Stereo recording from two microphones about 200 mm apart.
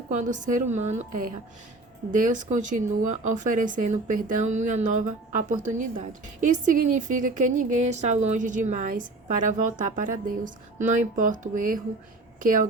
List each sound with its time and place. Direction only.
0.1 s speech: 40° right (ahead or behind)
2.1 s speech: 40° right (ahead or behind)